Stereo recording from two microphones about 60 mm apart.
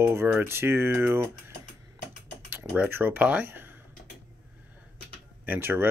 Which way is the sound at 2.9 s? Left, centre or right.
Right.